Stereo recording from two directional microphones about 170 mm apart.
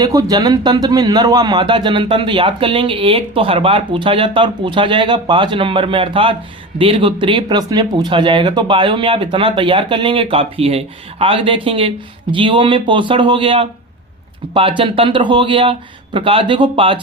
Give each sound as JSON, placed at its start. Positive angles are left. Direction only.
{"t": 0.0, "sound": "speech", "side_deg": -20}